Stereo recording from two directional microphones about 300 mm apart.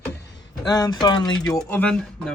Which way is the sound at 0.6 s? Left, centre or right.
Centre.